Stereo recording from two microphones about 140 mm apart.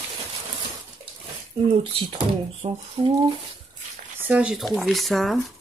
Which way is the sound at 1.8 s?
40° right (ahead or behind).